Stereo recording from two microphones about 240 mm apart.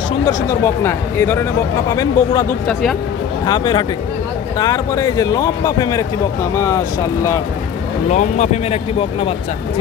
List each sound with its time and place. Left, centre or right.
0.3 s a man's voice: centre
3.4 s a man's voice: centre
8.1 s speech: left